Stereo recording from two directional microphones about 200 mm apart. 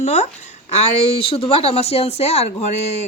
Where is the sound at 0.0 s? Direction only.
35° left (ahead or behind).